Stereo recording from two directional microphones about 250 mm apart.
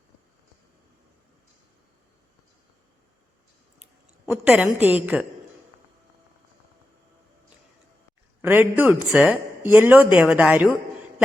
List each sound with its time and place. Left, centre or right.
4.3 s a woman's voice: centre
8.4 s a woman's voice: centre